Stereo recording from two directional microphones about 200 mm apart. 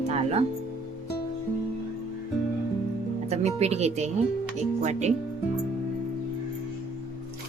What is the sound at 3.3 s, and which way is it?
Speech, 30° right (ahead or behind).